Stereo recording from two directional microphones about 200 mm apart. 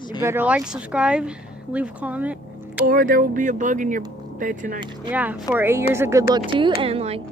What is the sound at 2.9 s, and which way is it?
Speech, 45° right (ahead or behind).